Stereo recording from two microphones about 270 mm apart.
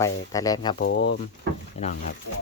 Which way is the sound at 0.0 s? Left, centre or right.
Centre.